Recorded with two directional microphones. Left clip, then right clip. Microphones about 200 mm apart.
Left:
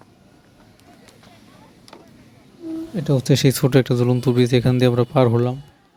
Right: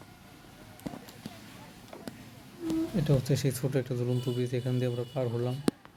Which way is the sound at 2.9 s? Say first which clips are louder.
Left 10 dB; 40° left (ahead or behind).